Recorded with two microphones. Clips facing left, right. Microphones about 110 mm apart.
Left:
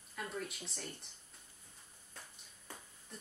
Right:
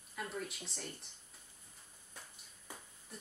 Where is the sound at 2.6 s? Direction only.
5° right (ahead or behind).